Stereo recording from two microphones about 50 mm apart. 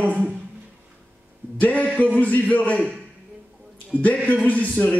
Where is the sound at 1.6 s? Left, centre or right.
Left.